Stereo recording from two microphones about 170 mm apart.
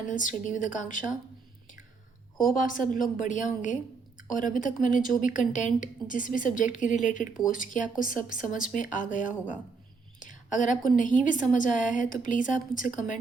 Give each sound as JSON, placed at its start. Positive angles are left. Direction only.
{"t": 0.1, "sound": "a woman's voice", "side_deg": 50}
{"t": 2.4, "sound": "a woman's voice", "side_deg": 55}